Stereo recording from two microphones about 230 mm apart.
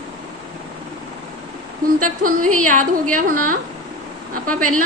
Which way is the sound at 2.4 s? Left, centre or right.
Right.